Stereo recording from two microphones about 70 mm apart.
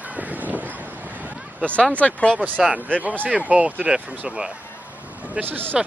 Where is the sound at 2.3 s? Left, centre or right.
Right.